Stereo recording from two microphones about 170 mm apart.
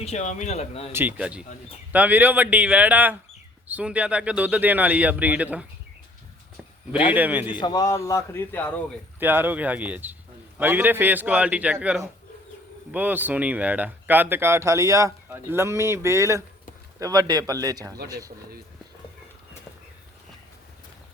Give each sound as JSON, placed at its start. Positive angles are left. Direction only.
{"t": 0.0, "sound": "speech", "side_deg": 40}
{"t": 0.9, "sound": "speech", "side_deg": -10}
{"t": 6.9, "sound": "speech", "side_deg": -10}
{"t": 7.5, "sound": "a man's voice", "side_deg": 25}
{"t": 9.2, "sound": "speech", "side_deg": -10}